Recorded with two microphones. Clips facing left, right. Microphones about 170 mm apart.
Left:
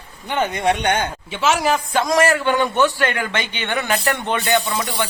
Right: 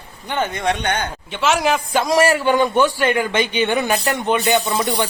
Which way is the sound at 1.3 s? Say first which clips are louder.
Right 1 dB; 5° left (ahead or behind).